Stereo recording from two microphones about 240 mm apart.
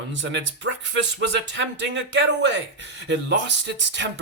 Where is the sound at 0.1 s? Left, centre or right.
Right.